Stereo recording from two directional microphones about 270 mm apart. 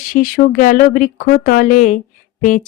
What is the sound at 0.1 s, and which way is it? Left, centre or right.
Speech, left.